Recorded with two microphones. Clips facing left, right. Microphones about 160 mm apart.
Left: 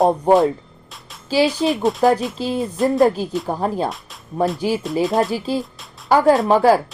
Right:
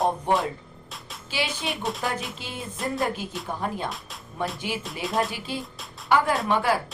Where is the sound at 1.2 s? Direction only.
35° left (ahead or behind).